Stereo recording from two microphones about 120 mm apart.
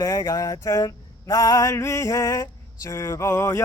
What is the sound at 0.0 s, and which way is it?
Male singing, 30° left (ahead or behind).